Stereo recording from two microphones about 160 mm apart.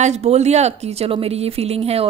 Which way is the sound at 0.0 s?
45° right (ahead or behind).